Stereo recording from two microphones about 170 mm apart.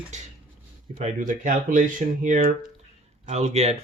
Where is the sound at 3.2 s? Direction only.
40° right (ahead or behind).